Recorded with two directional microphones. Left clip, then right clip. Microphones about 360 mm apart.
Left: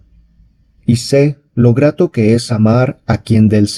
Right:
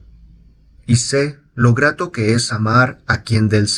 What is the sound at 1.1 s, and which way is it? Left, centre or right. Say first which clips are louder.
Speech: left 8 dB; left.